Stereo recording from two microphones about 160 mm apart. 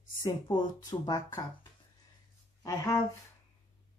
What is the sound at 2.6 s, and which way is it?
Speech, 20° left (ahead or behind).